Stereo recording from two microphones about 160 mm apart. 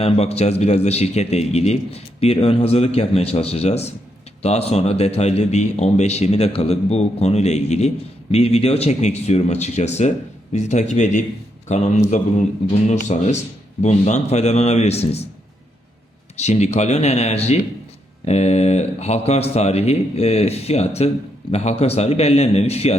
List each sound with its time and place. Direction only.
0.0 s a man's voice: 40° left (ahead or behind)
16.4 s a man's voice: 45° left (ahead or behind)